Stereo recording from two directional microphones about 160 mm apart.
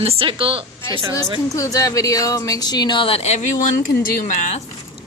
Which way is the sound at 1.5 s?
20° left (ahead or behind).